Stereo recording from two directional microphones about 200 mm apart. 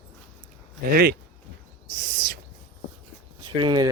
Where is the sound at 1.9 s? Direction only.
45° right (ahead or behind).